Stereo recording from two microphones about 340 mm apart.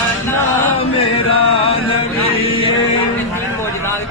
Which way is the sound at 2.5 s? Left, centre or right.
Centre.